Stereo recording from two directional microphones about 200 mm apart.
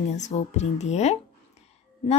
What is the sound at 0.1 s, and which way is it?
Speech, 35° left (ahead or behind).